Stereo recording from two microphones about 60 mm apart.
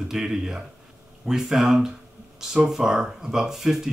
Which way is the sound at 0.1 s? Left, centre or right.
Centre.